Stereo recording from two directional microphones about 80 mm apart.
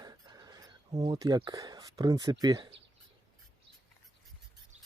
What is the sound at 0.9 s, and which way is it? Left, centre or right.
Speech, right.